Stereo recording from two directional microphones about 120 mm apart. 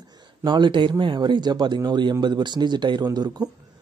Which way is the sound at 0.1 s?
35° right (ahead or behind).